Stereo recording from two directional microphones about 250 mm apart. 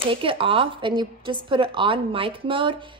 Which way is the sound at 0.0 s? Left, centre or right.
Right.